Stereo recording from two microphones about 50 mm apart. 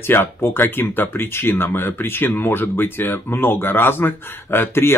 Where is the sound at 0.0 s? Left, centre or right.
Left.